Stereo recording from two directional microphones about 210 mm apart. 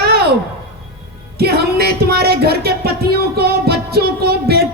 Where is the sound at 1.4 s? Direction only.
50° right (ahead or behind).